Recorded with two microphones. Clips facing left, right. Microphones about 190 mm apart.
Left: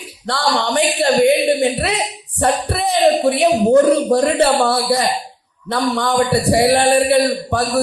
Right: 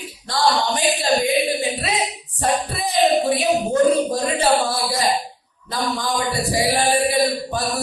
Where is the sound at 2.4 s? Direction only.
65° left (ahead or behind).